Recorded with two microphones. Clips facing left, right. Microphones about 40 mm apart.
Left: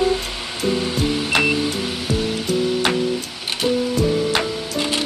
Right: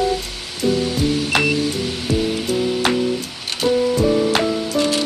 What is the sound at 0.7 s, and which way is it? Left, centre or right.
Music, left.